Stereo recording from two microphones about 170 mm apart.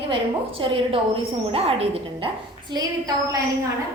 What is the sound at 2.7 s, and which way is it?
Speech, 20° right (ahead or behind).